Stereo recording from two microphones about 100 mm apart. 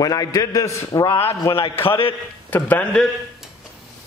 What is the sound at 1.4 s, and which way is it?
Speech, 55° left (ahead or behind).